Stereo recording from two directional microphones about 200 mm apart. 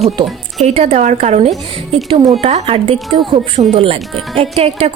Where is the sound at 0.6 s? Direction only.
35° right (ahead or behind).